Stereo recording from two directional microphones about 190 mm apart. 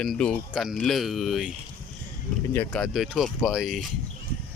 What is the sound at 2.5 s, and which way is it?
Speech, 5° left (ahead or behind).